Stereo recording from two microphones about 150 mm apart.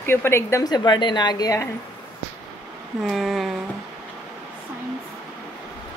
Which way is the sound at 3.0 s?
Centre (ahead or behind).